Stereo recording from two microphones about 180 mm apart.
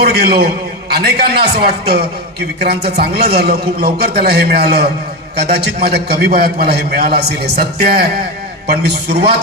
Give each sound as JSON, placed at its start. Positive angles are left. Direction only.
{"t": 0.0, "sound": "a man's voice", "side_deg": -60}